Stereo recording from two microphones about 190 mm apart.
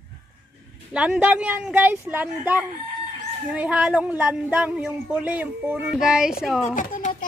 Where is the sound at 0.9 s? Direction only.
5° right (ahead or behind).